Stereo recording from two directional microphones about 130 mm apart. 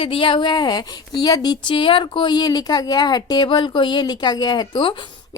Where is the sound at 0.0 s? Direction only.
45° left (ahead or behind).